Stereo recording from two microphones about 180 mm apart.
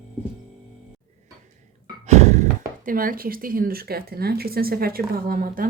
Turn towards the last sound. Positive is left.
turn(degrees=-50)  # may be behind; listen again after turning